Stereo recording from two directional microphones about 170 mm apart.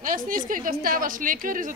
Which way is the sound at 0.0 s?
50° right (ahead or behind).